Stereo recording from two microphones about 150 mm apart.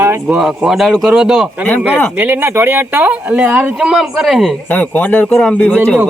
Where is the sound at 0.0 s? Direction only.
20° right (ahead or behind).